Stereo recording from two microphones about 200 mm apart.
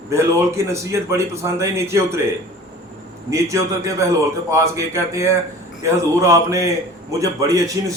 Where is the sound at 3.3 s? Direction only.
15° right (ahead or behind).